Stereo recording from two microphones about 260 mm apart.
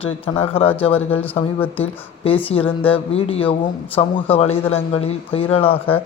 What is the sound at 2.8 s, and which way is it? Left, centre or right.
Speech, left.